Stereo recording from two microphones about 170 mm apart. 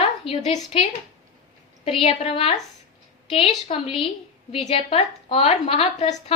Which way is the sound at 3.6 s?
35° left (ahead or behind).